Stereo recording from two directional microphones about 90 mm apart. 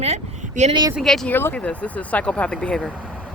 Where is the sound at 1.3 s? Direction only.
25° left (ahead or behind).